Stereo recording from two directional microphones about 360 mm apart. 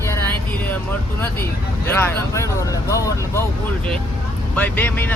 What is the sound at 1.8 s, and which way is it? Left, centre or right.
Speech, centre.